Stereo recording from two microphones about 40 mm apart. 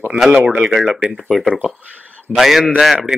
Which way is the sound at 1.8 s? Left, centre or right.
Right.